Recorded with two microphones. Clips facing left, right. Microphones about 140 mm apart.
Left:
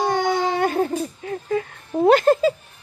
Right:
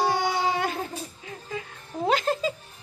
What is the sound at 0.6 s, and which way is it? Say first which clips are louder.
Music: left 9 dB; 50° left (ahead or behind).